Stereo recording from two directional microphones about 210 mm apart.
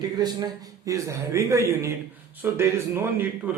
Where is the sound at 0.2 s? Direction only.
20° right (ahead or behind).